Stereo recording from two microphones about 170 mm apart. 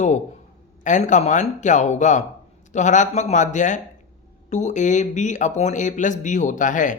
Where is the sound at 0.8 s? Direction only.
45° left (ahead or behind).